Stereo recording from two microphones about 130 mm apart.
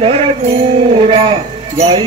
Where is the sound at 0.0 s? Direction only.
50° right (ahead or behind).